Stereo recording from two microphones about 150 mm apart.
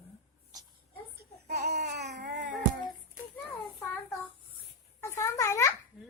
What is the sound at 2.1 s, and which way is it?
Cat, 65° right (ahead or behind).